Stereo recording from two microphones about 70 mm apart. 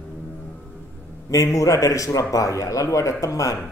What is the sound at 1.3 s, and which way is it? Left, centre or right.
A man's voice, left.